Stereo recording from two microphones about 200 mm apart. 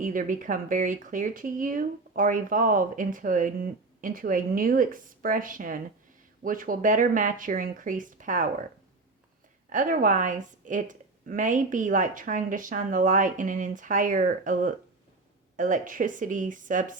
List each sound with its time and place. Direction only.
0.0 s a woman's voice: 40° right (ahead or behind)
9.7 s a woman's voice: 40° right (ahead or behind)